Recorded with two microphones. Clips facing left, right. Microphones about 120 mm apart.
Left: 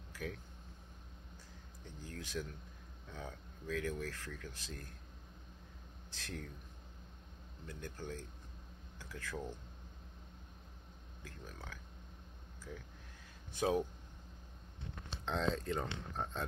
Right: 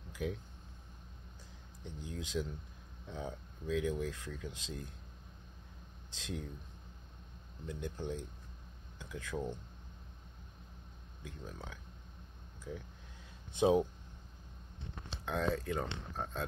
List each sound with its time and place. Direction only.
0.1 s a sound: 15° right (ahead or behind)
2.0 s speech: 15° right (ahead or behind)
6.0 s speech: 15° right (ahead or behind)
7.6 s speech: 20° right (ahead or behind)
11.2 s speech: 15° right (ahead or behind)
15.2 s speech: 5° right (ahead or behind)